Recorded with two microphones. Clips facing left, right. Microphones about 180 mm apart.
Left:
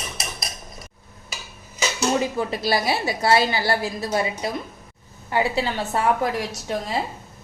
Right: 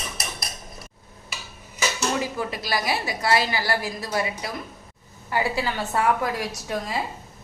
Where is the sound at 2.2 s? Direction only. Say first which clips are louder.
Left 4 dB; 25° left (ahead or behind).